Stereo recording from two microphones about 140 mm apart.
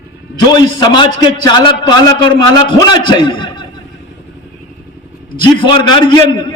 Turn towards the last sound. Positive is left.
turn(degrees=35)  # may be behind; listen again after turning